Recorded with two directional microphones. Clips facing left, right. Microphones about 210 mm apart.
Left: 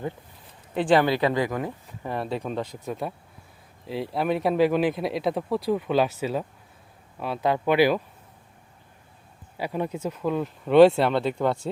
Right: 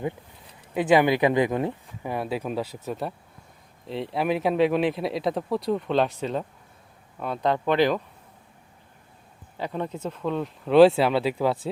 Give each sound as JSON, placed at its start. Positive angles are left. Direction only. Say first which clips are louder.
{"t": 0.7, "sound": "speech", "louder": "right 1 dB", "side_deg": -10}
{"t": 2.0, "sound": "speech", "louder": "right 1 dB", "side_deg": -5}
{"t": 9.6, "sound": "speech", "louder": "left 2 dB", "side_deg": 10}